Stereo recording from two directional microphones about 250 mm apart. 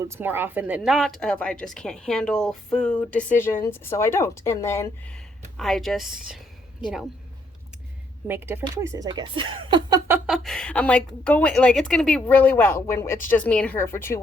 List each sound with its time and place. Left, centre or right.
0.1 s speech: centre
8.3 s speech: centre
10.2 s speech: centre